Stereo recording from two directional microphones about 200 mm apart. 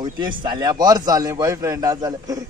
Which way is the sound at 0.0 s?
25° right (ahead or behind).